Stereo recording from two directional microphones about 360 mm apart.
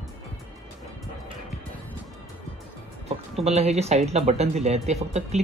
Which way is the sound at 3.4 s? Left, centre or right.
Centre.